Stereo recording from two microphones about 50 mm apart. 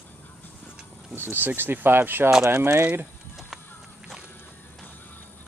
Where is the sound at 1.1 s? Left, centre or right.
Right.